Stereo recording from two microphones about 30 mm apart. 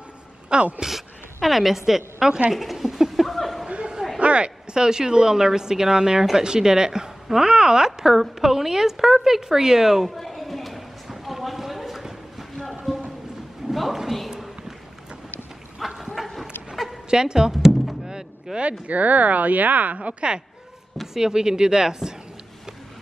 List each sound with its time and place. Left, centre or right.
0.5 s a woman's voice: right
0.8 s a woman's voice: centre
3.1 s chuckle: centre
4.2 s a sound: right
4.7 s a woman's voice: right
10.0 s a sound: centre
13.7 s a sound: centre
15.8 s dog: centre
17.1 s a woman's voice: right
17.5 s thunk: centre
18.6 s speech: right
20.0 s a woman's voice: right
21.1 s a woman's voice: right